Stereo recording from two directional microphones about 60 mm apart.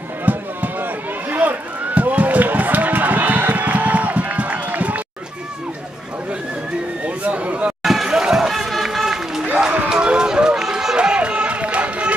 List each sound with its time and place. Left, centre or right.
0.2 s run: right
7.1 s a sound: right
7.8 s run: centre; by 12.2 s right